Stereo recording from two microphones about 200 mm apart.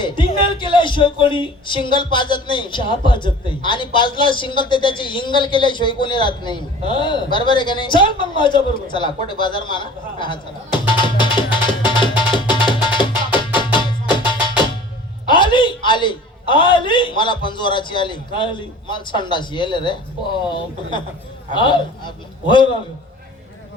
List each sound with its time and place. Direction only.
0.0 s speech: 25° left (ahead or behind)
15.3 s a man's voice: 25° left (ahead or behind)